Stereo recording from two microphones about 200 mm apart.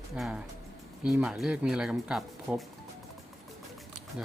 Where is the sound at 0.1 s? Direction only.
5° right (ahead or behind).